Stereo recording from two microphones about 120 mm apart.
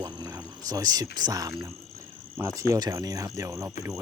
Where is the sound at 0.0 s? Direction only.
35° right (ahead or behind).